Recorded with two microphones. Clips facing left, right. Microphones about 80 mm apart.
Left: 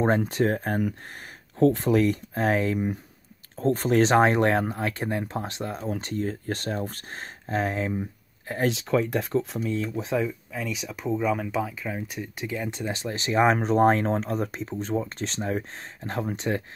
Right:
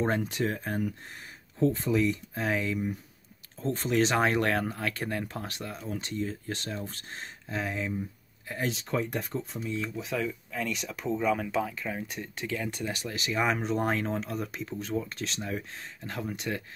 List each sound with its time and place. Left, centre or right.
0.0 s speech: left
5.8 s speech: left
7.9 s a sound: left
8.6 s speech: left
10.0 s speech: left
10.5 s speech: centre
12.4 s speech: left